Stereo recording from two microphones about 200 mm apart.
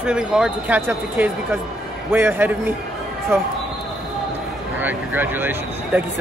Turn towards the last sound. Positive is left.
turn(degrees=-10)  # may be behind; listen again after turning